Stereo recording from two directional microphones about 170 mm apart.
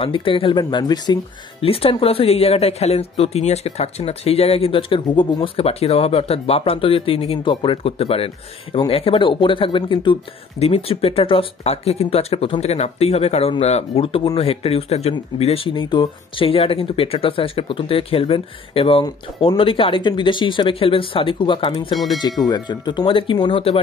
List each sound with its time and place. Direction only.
0.0 s speech: 30° left (ahead or behind)
21.9 s speech: centre (ahead or behind)
22.5 s speech: 25° left (ahead or behind)